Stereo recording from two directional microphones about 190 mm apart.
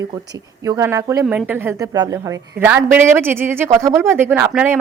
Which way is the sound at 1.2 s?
5° right (ahead or behind).